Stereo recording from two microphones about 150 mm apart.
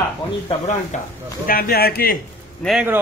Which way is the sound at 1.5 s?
85° left.